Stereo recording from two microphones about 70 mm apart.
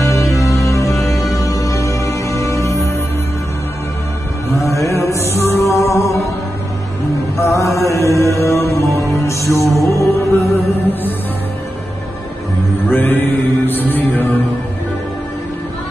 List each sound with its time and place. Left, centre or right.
0.0 s music: left
4.6 s music: left
7.3 s chant: left
7.7 s mantra: left
8.8 s music: right
9.2 s music: left
12.9 s music: left